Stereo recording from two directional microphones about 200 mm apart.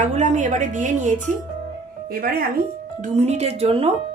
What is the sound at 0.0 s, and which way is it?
A woman's voice, 35° right (ahead or behind).